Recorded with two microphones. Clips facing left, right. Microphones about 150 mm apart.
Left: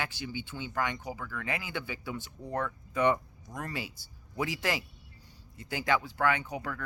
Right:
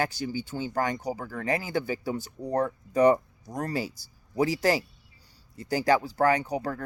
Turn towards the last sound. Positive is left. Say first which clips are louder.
# right 7 dB
turn(degrees=-35)  # may be behind; listen again after turning